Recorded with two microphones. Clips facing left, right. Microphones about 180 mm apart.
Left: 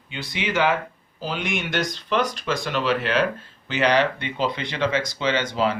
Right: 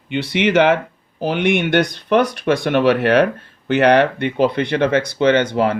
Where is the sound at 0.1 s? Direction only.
70° right (ahead or behind).